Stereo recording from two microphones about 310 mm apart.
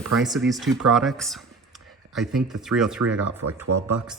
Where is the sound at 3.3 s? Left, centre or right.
Right.